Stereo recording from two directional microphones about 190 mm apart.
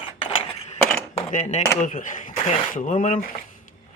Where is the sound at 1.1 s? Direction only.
40° left (ahead or behind).